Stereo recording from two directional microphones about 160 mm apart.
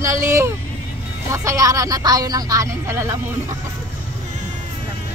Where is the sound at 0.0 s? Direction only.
20° right (ahead or behind).